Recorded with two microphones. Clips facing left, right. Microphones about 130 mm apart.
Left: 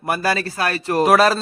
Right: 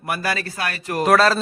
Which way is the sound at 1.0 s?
10° left (ahead or behind).